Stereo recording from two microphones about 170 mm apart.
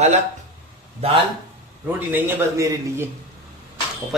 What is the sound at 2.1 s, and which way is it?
Speech, 15° right (ahead or behind).